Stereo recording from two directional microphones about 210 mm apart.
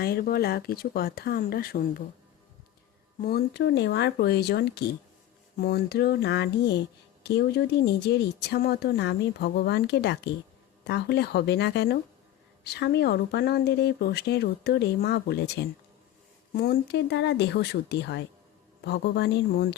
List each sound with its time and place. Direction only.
0.0 s speech: 45° left (ahead or behind)
3.2 s speech: 45° left (ahead or behind)